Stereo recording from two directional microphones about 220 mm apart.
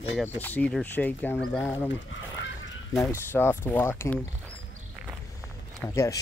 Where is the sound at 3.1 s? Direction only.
10° left (ahead or behind).